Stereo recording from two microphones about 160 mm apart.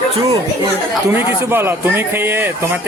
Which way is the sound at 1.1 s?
15° right (ahead or behind).